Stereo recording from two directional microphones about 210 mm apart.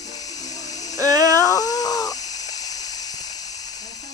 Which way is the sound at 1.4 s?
15° left (ahead or behind).